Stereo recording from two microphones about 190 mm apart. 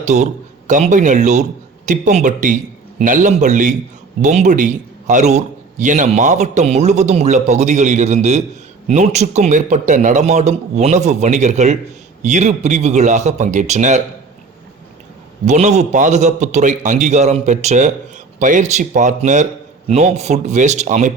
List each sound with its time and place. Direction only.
0.0 s a man's voice: 40° right (ahead or behind)
15.4 s a man's voice: 35° right (ahead or behind)